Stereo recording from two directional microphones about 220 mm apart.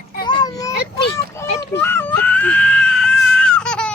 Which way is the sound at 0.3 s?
20° left (ahead or behind).